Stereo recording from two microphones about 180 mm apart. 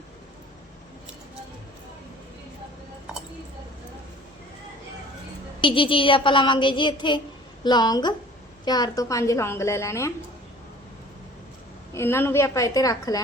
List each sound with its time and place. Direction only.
5.5 s a woman's voice: 30° left (ahead or behind)
11.9 s a woman's voice: 15° left (ahead or behind)